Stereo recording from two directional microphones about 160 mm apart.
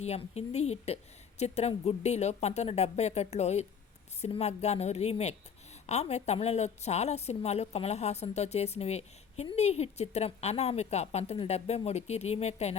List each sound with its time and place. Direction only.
0.0 s a woman's voice: 40° left (ahead or behind)